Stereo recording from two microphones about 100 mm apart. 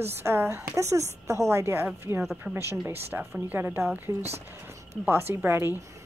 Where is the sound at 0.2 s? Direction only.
25° right (ahead or behind).